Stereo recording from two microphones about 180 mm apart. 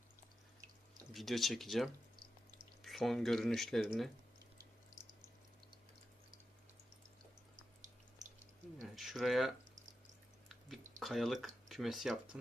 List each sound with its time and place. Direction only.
1.1 s speech: centre (ahead or behind)
8.8 s a sound: centre (ahead or behind)
11.0 s speech: centre (ahead or behind)